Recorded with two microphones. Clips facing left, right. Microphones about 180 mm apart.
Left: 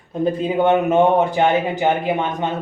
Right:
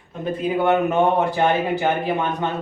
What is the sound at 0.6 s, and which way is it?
Speech, 20° left (ahead or behind).